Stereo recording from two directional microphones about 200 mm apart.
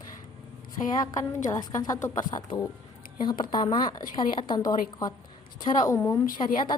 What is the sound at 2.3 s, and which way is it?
A woman's voice, 30° left (ahead or behind).